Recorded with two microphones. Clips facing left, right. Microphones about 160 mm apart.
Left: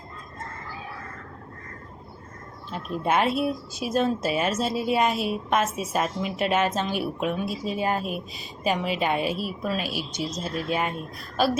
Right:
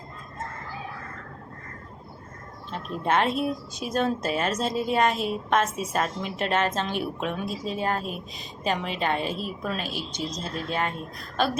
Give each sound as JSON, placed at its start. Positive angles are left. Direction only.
{"t": 2.6, "sound": "speech", "side_deg": 10}